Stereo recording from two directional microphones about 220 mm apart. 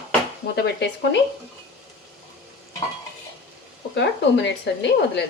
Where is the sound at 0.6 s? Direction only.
50° left (ahead or behind).